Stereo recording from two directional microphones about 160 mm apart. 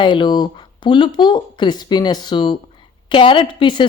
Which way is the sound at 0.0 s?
30° left (ahead or behind).